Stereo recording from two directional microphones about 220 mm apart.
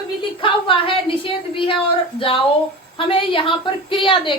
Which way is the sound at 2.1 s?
25° left (ahead or behind).